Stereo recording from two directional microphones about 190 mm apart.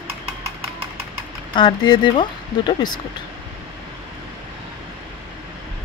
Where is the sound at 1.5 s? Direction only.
25° left (ahead or behind).